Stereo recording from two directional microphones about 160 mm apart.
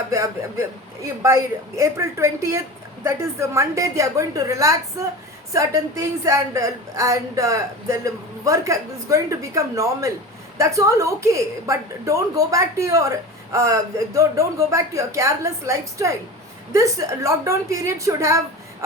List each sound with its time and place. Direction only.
1.0 s a woman's voice: 20° right (ahead or behind)